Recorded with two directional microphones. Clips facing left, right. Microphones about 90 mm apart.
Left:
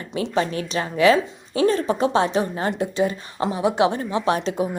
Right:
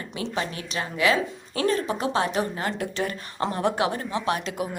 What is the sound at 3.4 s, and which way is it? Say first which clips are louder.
Speech: left 3 dB; 5° left (ahead or behind).